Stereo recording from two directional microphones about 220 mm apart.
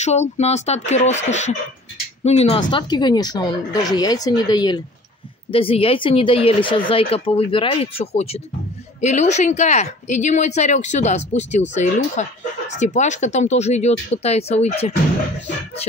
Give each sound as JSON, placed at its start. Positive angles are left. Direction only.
{"t": 0.0, "sound": "speech", "side_deg": 30}